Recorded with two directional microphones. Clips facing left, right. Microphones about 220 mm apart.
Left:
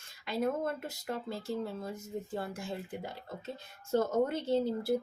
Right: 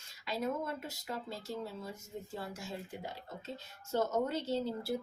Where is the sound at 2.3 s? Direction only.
55° left (ahead or behind).